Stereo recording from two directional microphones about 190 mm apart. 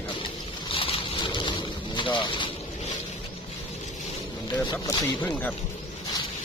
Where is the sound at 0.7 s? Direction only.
30° left (ahead or behind).